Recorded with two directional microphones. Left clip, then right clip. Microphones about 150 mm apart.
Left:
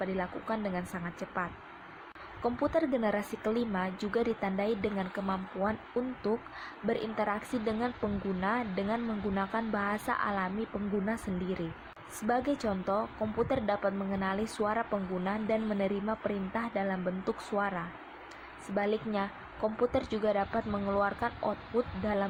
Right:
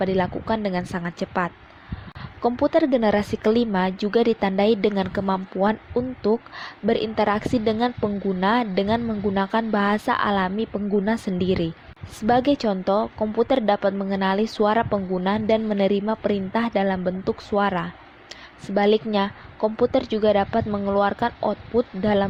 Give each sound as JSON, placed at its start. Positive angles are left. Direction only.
{"t": 0.0, "sound": "speech", "side_deg": -55}
{"t": 2.4, "sound": "speech", "side_deg": -45}
{"t": 3.9, "sound": "speech", "side_deg": -45}
{"t": 21.1, "sound": "speech", "side_deg": -50}